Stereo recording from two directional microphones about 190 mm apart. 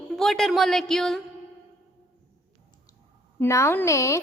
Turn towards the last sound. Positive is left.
turn(degrees=15)  # may be behind; listen again after turning